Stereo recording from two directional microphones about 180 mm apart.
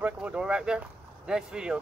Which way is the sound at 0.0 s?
5° right (ahead or behind).